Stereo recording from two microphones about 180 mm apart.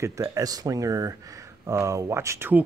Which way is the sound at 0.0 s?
15° right (ahead or behind).